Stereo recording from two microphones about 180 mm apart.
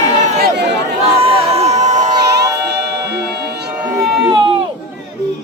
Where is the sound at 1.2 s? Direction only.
35° right (ahead or behind).